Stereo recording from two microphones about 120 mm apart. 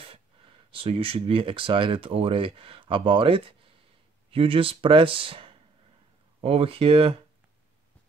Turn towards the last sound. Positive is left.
turn(degrees=-50)  # may be behind; listen again after turning